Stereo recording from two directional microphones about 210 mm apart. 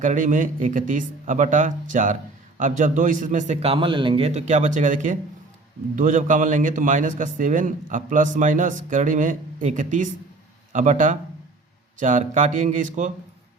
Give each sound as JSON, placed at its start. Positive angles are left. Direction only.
{"t": 0.0, "sound": "a man's voice", "side_deg": -35}